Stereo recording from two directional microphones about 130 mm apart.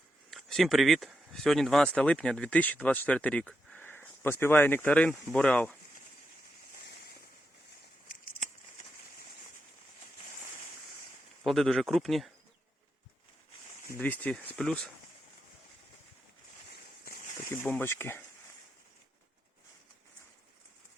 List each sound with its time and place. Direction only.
0.3 s speech: centre (ahead or behind)
8.0 s a sound: 90° left
11.4 s speech: centre (ahead or behind)
14.0 s speech: 10° left (ahead or behind)
17.5 s speech: 15° left (ahead or behind)